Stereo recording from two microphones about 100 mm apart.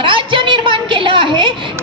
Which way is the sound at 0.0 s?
55° right (ahead or behind).